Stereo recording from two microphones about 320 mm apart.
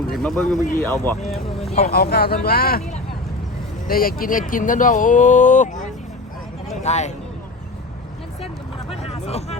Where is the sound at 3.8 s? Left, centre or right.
Left.